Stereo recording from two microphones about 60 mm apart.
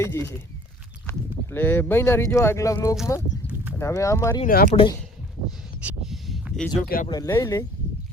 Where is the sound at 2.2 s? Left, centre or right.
Left.